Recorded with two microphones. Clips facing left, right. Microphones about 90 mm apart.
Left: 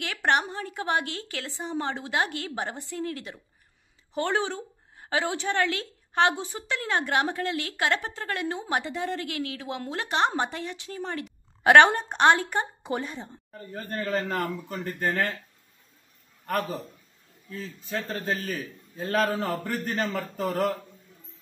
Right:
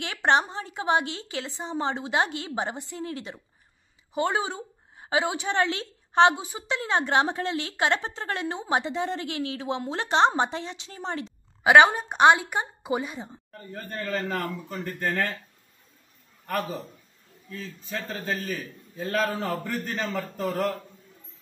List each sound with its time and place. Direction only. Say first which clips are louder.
0.0 s a woman's voice: right 2 dB; 25° right (ahead or behind)
4.1 s a woman's voice: right 1 dB; 15° right (ahead or behind)
11.6 s a woman's voice: even; 5° right (ahead or behind)
13.5 s a man's voice: left 2 dB; centre (ahead or behind)
16.4 s a man's voice: left 1 dB; centre (ahead or behind)